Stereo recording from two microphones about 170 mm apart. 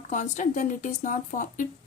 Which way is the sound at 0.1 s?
45° left (ahead or behind).